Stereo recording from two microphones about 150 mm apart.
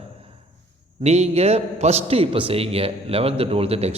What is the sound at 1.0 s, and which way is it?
A man's voice, 45° right (ahead or behind).